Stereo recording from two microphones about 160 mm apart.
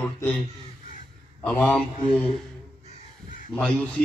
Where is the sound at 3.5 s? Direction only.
5° left (ahead or behind).